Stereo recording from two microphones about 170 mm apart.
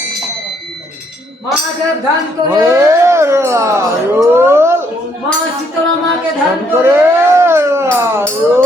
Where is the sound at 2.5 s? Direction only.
15° right (ahead or behind).